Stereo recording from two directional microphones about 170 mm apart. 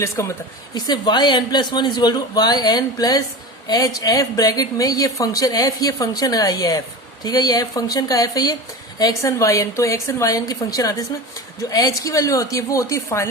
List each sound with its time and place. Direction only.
0.0 s speech: 15° left (ahead or behind)